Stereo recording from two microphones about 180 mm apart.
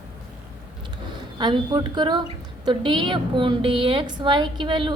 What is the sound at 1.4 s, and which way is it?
A woman's voice, 25° right (ahead or behind).